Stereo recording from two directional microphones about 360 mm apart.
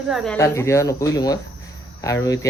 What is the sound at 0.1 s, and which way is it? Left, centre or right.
Speech, centre.